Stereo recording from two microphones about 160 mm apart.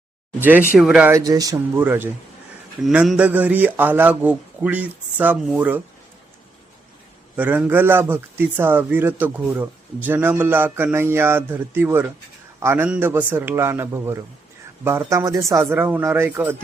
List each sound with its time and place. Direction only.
0.3 s speech: 10° right (ahead or behind)
1.1 s speech: 20° right (ahead or behind)
7.3 s speech: 10° right (ahead or behind)